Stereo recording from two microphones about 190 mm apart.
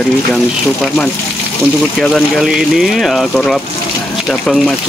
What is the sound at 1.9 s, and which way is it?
Speech, centre (ahead or behind).